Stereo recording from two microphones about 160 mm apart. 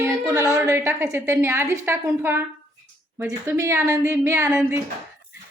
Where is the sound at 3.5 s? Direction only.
15° right (ahead or behind).